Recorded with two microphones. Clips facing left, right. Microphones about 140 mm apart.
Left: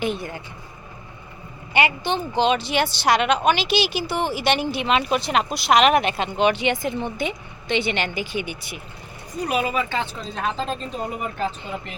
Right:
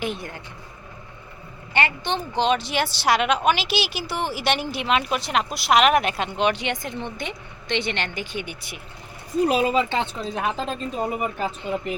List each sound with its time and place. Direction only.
0.0 s a woman's voice: centre (ahead or behind)
1.7 s a woman's voice: 10° left (ahead or behind)
9.5 s speech: 25° right (ahead or behind)
10.2 s speech: 10° right (ahead or behind)